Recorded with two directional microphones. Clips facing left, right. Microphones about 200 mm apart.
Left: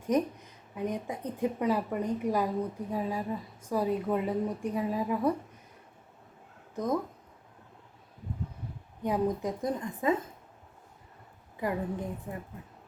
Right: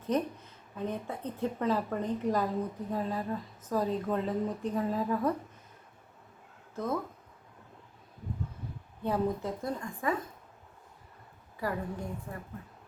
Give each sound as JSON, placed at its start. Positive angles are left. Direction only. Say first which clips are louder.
{"t": 0.0, "sound": "a woman's voice", "louder": "left 3 dB", "side_deg": 15}
{"t": 6.7, "sound": "a woman's voice", "louder": "left 3 dB", "side_deg": 15}
{"t": 9.0, "sound": "a woman's voice", "louder": "left 2 dB", "side_deg": 15}
{"t": 11.5, "sound": "a woman's voice", "louder": "left 3 dB", "side_deg": 20}